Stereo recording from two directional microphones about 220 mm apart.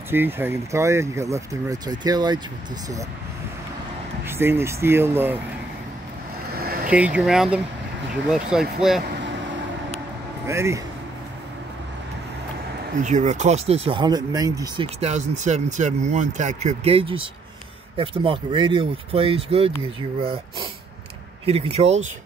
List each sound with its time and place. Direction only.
0.1 s speech: 10° right (ahead or behind)
4.2 s speech: 10° right (ahead or behind)
6.5 s vehicle: 45° right (ahead or behind)
6.9 s speech: 5° right (ahead or behind)
10.4 s speech: 10° right (ahead or behind)
12.9 s speech: 35° right (ahead or behind); by 14.9 s 15° right (ahead or behind)
15.0 s speech: 30° right (ahead or behind)